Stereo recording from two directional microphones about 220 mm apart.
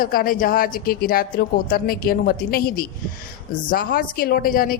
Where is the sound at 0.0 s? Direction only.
40° left (ahead or behind).